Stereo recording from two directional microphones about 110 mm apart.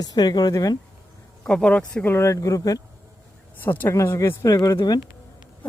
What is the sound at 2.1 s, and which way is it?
Speech, 25° left (ahead or behind).